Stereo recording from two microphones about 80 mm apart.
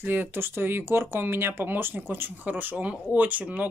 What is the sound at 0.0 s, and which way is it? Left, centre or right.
Speech, right.